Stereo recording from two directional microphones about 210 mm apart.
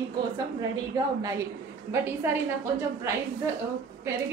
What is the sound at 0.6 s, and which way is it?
A woman's voice, 15° right (ahead or behind).